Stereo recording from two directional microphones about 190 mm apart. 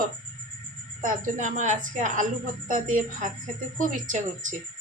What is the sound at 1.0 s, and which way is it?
Speech, 40° right (ahead or behind).